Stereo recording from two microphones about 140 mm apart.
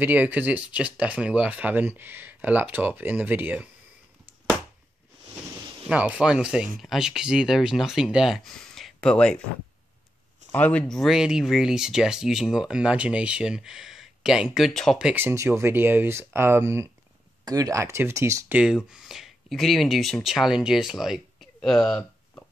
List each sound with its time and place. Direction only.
0.0 s speech: 10° right (ahead or behind)
5.9 s speech: 10° right (ahead or behind)
10.5 s speech: 10° left (ahead or behind); by 18.6 s 20° right (ahead or behind)
18.9 s speech: 5° right (ahead or behind)